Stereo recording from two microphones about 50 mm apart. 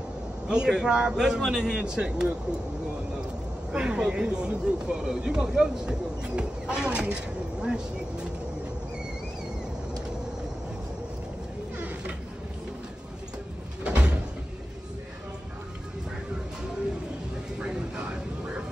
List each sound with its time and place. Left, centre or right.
0.5 s speech: centre
3.7 s speech: centre
13.8 s cupboard open or close: right